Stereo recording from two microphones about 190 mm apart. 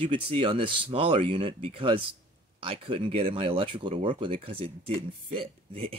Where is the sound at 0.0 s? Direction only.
25° right (ahead or behind).